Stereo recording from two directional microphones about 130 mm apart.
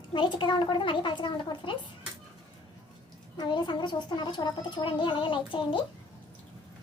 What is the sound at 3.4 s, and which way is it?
Speech, 35° left (ahead or behind).